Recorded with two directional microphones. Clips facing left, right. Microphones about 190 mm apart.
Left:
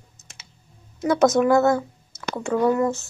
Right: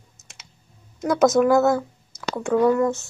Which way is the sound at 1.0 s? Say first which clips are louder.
Right 1 dB; centre (ahead or behind).